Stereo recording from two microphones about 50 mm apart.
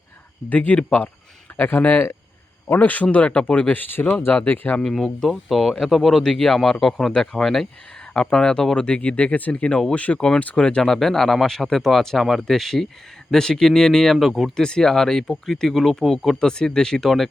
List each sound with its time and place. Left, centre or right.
0.5 s speech: left
3.8 s speech: left
4.8 s speech: centre
7.1 s speech: centre
7.4 s speech: centre
8.1 s speech: centre
10.2 s speech: centre
10.8 s speech: centre
14.5 s speech: centre